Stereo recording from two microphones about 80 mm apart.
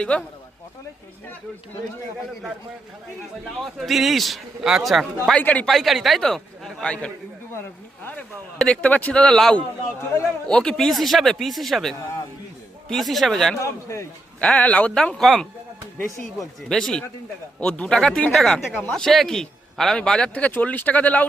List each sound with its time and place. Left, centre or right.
0.0 s speech: centre
3.6 s speech: centre
5.4 s speech: centre
5.6 s speech: centre
6.8 s speech: centre
8.5 s speech: centre
13.6 s a man's voice: left
14.4 s speech: centre
16.6 s speech: centre
18.7 s speech: centre
18.9 s speech: centre